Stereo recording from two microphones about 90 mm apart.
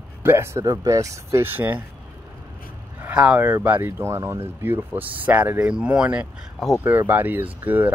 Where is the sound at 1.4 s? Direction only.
20° right (ahead or behind).